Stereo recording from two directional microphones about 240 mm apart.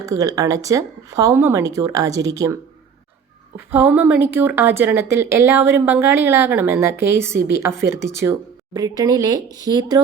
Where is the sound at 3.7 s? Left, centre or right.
Centre.